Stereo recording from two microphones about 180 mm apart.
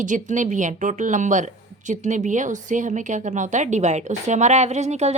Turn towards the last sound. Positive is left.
turn(degrees=-40)  # may be behind; listen again after turning